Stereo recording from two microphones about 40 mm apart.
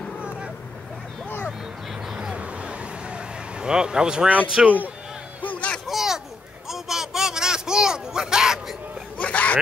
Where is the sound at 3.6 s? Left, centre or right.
Right.